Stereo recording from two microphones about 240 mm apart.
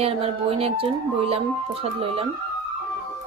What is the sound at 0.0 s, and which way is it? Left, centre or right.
Speech, right.